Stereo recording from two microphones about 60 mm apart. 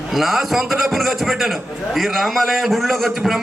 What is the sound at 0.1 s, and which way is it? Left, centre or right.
A man's voice, centre.